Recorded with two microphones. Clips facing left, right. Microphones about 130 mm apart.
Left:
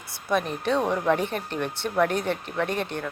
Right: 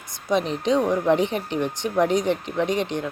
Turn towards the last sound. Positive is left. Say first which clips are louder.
# right 4 dB
turn(degrees=-15)  # may be behind; listen again after turning